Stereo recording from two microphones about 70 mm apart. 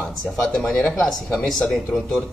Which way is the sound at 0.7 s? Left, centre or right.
Left.